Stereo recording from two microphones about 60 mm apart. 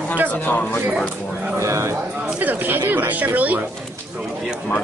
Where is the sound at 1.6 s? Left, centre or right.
Right.